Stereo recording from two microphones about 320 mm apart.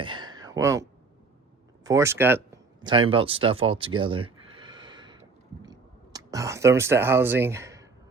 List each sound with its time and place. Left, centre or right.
0.0 s a sound: centre
1.8 s speech: centre
6.1 s speech: centre